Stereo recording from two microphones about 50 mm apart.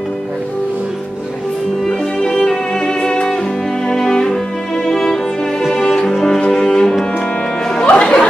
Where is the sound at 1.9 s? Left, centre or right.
Centre.